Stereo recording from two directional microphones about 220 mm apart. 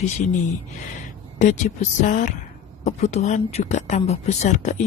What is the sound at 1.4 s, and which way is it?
Speech, 35° left (ahead or behind).